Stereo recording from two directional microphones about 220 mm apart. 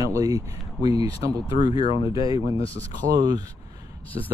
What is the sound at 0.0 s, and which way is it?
Speech, 15° right (ahead or behind).